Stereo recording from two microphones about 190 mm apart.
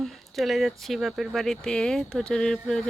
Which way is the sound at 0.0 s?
Centre (ahead or behind).